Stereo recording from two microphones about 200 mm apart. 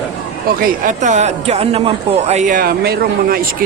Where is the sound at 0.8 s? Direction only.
35° right (ahead or behind).